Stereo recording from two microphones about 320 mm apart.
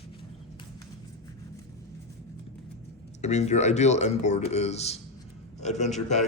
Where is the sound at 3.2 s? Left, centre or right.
Left.